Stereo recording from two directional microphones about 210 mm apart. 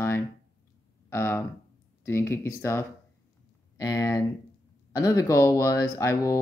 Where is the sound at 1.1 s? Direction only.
10° left (ahead or behind).